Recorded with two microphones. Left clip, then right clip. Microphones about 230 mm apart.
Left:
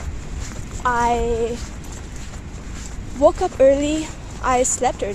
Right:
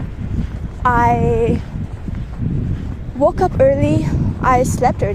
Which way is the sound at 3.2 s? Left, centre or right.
Right.